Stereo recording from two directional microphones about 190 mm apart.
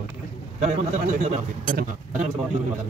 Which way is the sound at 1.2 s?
40° right (ahead or behind).